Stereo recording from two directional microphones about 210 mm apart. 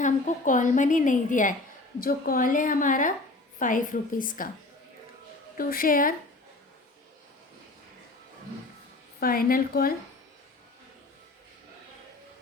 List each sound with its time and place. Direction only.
0.0 s a woman's voice: 35° left (ahead or behind)
5.5 s a woman's voice: 40° left (ahead or behind)
9.2 s a woman's voice: 45° left (ahead or behind)